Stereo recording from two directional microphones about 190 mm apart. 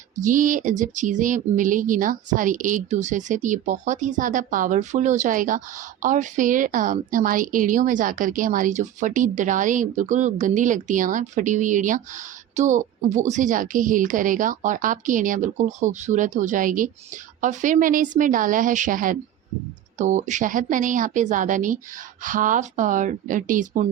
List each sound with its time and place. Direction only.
0.2 s speech: 45° right (ahead or behind)